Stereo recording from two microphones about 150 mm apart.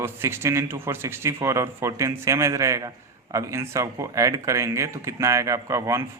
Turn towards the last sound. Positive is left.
turn(degrees=-20)  # may be behind; listen again after turning